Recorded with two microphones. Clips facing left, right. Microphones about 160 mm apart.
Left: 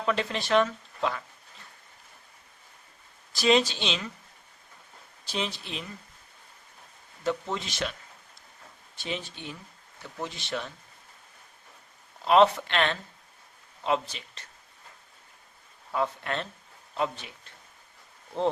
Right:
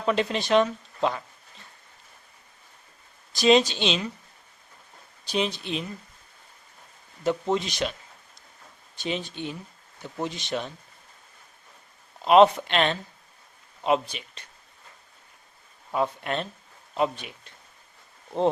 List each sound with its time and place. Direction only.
0.0 s speech: 20° right (ahead or behind)
3.3 s speech: 20° right (ahead or behind)
5.2 s speech: 15° right (ahead or behind)
7.3 s speech: 20° right (ahead or behind)
9.0 s speech: 20° right (ahead or behind)
12.2 s speech: 20° right (ahead or behind)
15.9 s a man's voice: 20° right (ahead or behind)